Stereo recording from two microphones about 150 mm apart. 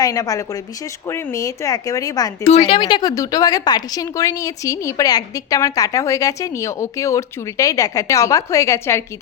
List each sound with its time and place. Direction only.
0.0 s a woman's voice: 25° left (ahead or behind)
2.4 s speech: 45° left (ahead or behind)
2.7 s a woman's voice: 30° left (ahead or behind)